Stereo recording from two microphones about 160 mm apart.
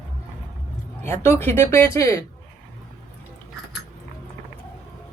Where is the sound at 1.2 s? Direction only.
15° left (ahead or behind).